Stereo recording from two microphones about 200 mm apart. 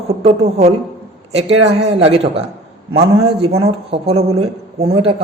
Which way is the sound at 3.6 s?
30° right (ahead or behind).